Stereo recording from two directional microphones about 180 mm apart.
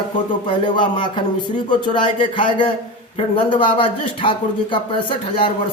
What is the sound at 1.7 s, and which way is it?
A man's voice, 25° left (ahead or behind).